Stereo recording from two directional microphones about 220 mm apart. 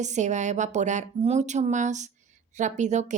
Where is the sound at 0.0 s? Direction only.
35° right (ahead or behind).